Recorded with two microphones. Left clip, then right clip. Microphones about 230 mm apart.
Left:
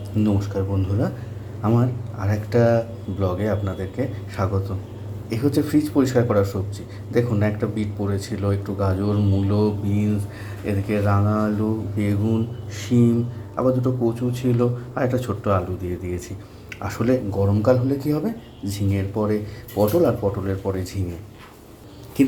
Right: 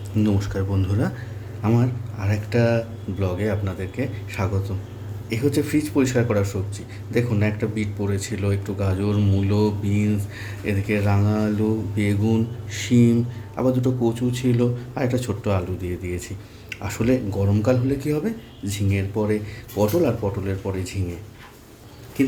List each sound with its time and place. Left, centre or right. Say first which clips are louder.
0.2 s speech: left 1 dB; centre